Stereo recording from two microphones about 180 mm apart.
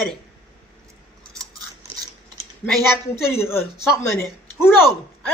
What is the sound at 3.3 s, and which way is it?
A woman's voice, 15° left (ahead or behind).